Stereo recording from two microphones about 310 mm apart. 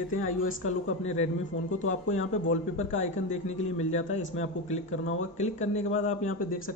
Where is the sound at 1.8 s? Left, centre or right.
Left.